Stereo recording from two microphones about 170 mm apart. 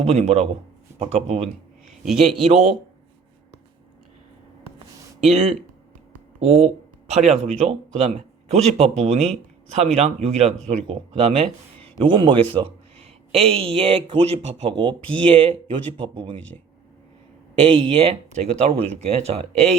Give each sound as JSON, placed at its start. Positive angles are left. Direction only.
{"t": 0.0, "sound": "speech", "side_deg": -40}
{"t": 1.9, "sound": "a sound", "side_deg": 0}
{"t": 2.4, "sound": "speech", "side_deg": -35}
{"t": 5.2, "sound": "speech", "side_deg": -35}
{"t": 17.5, "sound": "speech", "side_deg": -30}